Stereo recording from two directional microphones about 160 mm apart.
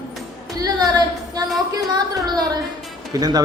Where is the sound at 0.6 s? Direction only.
25° right (ahead or behind).